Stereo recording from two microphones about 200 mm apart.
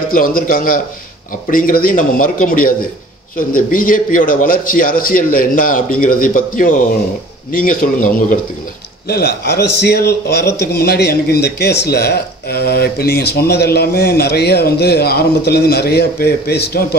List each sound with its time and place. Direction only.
0.1 s speech: 45° left (ahead or behind)